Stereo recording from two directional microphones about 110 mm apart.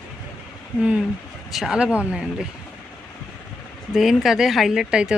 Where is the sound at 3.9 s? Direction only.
5° right (ahead or behind).